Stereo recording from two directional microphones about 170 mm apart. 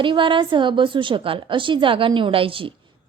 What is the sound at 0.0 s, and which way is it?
A woman's voice, 30° right (ahead or behind).